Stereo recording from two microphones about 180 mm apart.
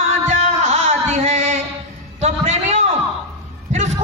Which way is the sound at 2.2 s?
40° right (ahead or behind).